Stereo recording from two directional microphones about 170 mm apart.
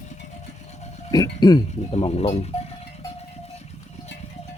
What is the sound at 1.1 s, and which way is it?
Speech, 25° left (ahead or behind).